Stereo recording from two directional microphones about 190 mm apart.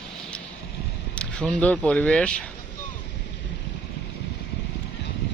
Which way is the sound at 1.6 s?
5° left (ahead or behind).